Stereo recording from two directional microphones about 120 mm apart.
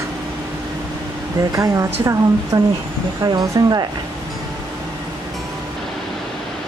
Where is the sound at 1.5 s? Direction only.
30° right (ahead or behind).